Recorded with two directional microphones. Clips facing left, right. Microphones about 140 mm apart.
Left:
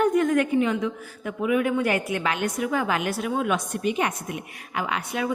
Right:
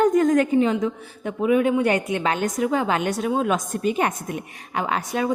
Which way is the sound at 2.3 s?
35° right (ahead or behind).